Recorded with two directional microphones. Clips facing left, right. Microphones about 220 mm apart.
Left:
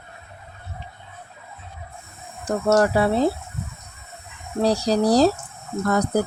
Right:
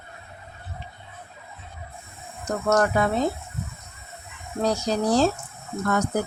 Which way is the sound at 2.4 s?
30° left (ahead or behind).